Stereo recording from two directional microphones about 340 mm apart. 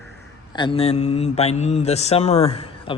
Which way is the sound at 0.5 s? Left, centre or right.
Centre.